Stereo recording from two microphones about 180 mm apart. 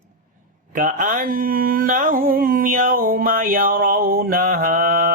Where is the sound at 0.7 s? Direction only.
45° right (ahead or behind).